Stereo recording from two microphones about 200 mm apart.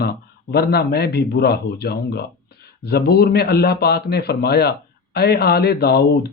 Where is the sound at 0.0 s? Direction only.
55° left (ahead or behind).